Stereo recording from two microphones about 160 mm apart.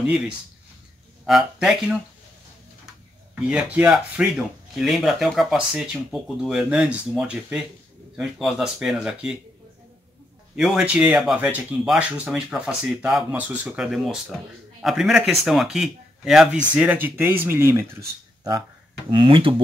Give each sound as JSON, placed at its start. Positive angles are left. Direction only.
{"t": 1.2, "sound": "speech", "side_deg": 0}
{"t": 3.4, "sound": "speech", "side_deg": -5}
{"t": 10.5, "sound": "speech", "side_deg": -5}
{"t": 19.0, "sound": "speech", "side_deg": -30}